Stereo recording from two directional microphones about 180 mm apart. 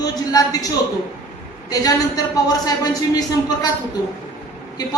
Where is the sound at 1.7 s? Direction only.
20° left (ahead or behind).